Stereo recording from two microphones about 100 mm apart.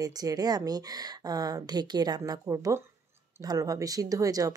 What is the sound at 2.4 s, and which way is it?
Speech, 30° right (ahead or behind).